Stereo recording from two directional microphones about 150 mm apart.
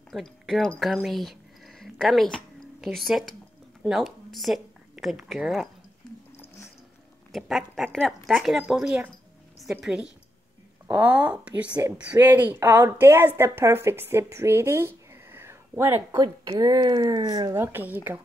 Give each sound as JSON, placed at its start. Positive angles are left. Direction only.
{"t": 0.1, "sound": "speech", "side_deg": 0}
{"t": 2.3, "sound": "a sound", "side_deg": 0}
{"t": 3.8, "sound": "speech", "side_deg": 0}
{"t": 7.3, "sound": "speech", "side_deg": 0}
{"t": 16.2, "sound": "speech", "side_deg": -25}
{"t": 17.6, "sound": "speech", "side_deg": -10}